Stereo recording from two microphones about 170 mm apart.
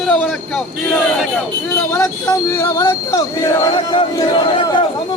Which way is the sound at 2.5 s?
15° left (ahead or behind).